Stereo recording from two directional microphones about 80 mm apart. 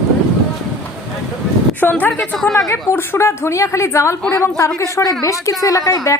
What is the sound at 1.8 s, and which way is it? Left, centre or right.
Speech, left.